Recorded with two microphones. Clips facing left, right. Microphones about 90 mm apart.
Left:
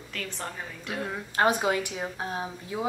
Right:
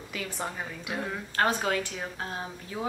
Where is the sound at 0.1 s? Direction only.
5° right (ahead or behind).